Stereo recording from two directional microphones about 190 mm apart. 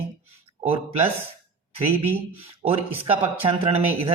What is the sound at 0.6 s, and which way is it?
Speech, 30° right (ahead or behind).